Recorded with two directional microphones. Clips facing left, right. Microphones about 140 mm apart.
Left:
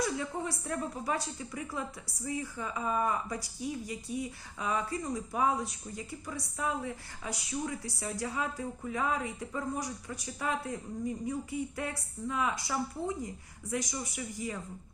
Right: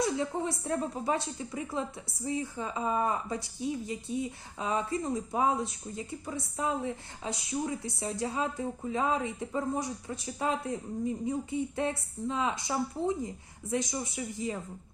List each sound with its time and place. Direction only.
0.0 s a woman's voice: 25° right (ahead or behind)